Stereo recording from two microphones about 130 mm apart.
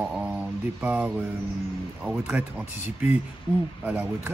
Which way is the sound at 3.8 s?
10° right (ahead or behind).